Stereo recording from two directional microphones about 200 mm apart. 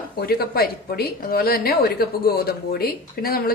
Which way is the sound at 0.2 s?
50° left (ahead or behind).